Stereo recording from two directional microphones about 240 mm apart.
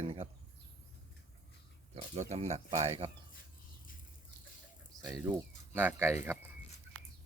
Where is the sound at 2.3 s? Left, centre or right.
Right.